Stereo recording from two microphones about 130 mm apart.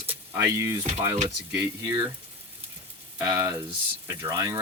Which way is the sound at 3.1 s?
30° right (ahead or behind).